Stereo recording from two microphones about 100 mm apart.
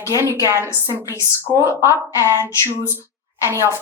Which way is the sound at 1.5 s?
45° right (ahead or behind).